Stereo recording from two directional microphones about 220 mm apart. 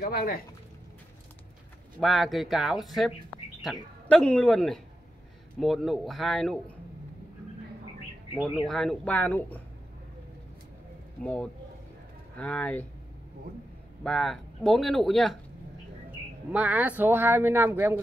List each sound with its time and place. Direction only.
0.0 s speech: 45° left (ahead or behind)
2.0 s speech: centre (ahead or behind)
4.1 s speech: 5° left (ahead or behind)
8.6 s speech: centre (ahead or behind)
12.4 s speech: 5° left (ahead or behind)
14.0 s speech: centre (ahead or behind)
16.5 s speech: 5° right (ahead or behind)